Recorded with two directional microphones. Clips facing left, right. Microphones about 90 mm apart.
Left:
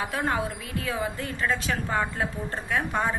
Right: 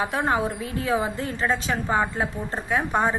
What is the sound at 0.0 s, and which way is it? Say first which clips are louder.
A woman's voice: right 4 dB; 25° right (ahead or behind).